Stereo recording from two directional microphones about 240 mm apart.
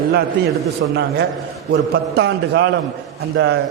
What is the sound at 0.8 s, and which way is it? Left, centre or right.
A man's voice, right.